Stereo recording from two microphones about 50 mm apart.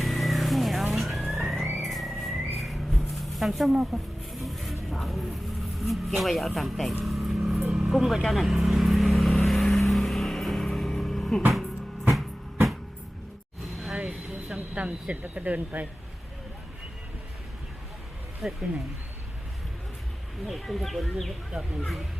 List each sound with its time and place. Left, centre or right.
0.0 s vehicle: centre
0.9 s music: centre
5.8 s speech: centre
7.0 s vehicle: centre
8.3 s speech: centre
9.5 s vehicle: centre
13.9 s a sound: centre
14.8 s speech: right
18.4 s speech: centre
20.5 s speech: centre